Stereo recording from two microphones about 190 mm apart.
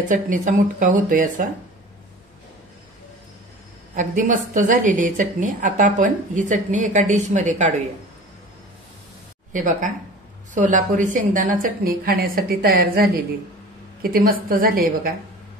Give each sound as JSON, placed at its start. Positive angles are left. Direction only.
{"t": 0.1, "sound": "a woman's voice", "side_deg": -45}
{"t": 3.9, "sound": "a woman's voice", "side_deg": -40}
{"t": 9.5, "sound": "a woman's voice", "side_deg": -45}